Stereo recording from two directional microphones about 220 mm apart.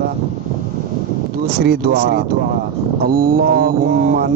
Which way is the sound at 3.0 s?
40° right (ahead or behind).